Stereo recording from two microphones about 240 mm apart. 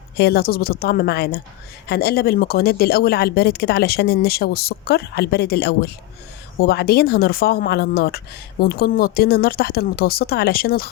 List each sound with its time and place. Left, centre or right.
0.2 s speech: left